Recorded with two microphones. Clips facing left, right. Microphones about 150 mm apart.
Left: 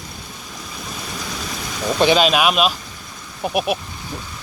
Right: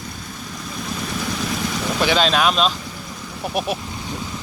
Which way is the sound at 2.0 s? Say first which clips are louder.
Left 3 dB; 15° left (ahead or behind).